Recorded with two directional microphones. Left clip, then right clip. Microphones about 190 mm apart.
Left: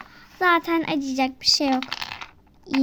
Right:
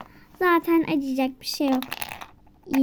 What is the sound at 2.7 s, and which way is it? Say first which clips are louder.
Speech: even; 25° right (ahead or behind).